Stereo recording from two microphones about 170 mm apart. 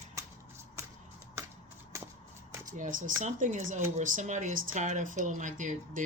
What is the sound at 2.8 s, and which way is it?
Speech, 50° right (ahead or behind).